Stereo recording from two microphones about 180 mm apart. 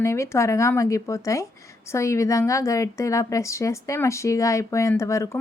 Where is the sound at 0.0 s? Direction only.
15° left (ahead or behind).